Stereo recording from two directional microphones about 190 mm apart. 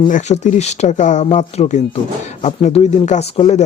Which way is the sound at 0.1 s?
40° left (ahead or behind).